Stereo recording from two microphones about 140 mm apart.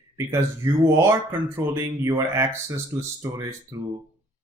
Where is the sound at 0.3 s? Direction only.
20° right (ahead or behind).